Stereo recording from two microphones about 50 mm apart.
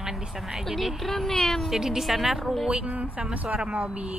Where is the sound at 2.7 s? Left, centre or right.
Right.